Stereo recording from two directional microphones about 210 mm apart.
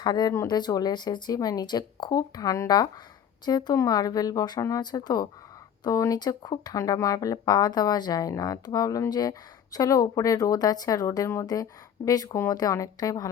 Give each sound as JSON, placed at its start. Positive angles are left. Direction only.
{"t": 0.0, "sound": "speech", "side_deg": 20}